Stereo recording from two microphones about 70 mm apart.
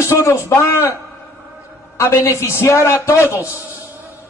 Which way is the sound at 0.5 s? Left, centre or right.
Left.